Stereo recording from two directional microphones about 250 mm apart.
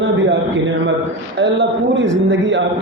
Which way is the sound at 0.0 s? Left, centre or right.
Right.